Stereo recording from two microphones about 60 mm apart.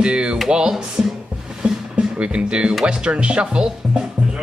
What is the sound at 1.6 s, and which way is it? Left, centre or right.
Music, centre.